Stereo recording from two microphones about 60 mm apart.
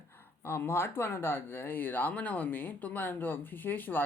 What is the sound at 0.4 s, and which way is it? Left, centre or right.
Speech, left.